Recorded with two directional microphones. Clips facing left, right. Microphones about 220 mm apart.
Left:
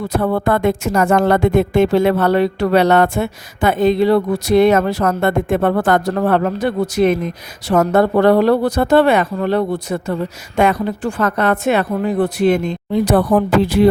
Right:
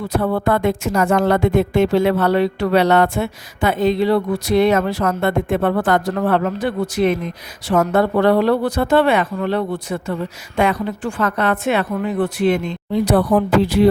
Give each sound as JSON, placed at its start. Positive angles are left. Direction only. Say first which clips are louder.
{"t": 0.2, "sound": "a woman's voice", "louder": "left 1 dB", "side_deg": 45}